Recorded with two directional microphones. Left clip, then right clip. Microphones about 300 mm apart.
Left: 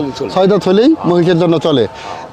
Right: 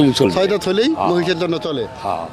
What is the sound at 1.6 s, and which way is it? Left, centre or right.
Speech, left.